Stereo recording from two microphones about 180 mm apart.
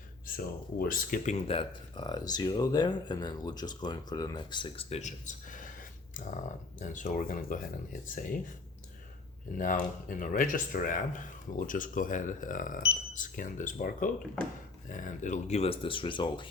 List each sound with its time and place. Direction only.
0.3 s speech: 55° left (ahead or behind)
9.6 s speech: 50° left (ahead or behind); by 16.5 s 25° left (ahead or behind)